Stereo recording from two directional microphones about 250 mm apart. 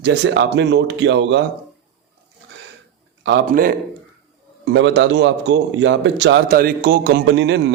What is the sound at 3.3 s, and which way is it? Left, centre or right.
Speech, right.